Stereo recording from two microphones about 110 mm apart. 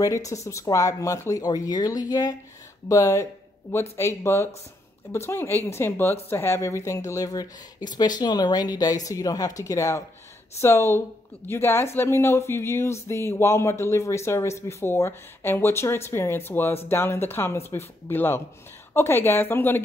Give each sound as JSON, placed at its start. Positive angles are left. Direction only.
{"t": 0.0, "sound": "speech", "side_deg": 30}